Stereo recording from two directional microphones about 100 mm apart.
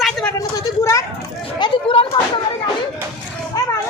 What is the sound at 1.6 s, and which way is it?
Speech, 55° left (ahead or behind).